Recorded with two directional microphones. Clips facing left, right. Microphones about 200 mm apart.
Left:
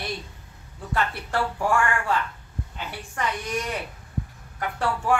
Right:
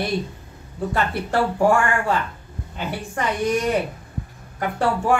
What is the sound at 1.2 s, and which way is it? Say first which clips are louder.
Speech: right 9 dB; 30° right (ahead or behind).